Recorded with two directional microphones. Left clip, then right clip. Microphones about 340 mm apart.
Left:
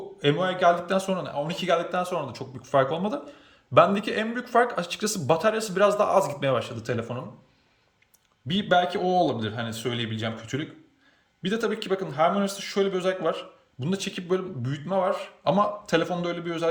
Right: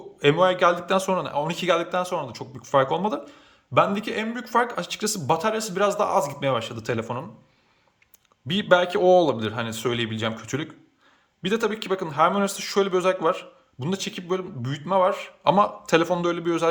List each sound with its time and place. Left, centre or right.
0.2 s speech: centre
8.4 s a man's voice: centre